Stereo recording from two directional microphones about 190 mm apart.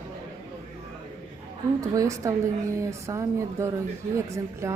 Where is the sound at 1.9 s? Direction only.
15° right (ahead or behind).